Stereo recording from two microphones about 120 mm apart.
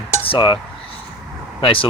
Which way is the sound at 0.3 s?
40° left (ahead or behind).